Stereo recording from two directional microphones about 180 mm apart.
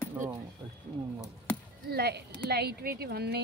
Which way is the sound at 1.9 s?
65° right (ahead or behind).